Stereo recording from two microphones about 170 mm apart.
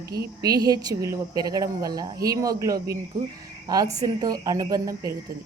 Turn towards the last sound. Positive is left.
turn(degrees=-20)  # may be behind; listen again after turning